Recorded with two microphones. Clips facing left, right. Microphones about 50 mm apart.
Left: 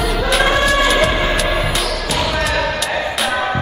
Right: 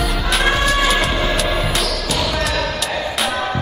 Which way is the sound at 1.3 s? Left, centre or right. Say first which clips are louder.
Left 1 dB; centre.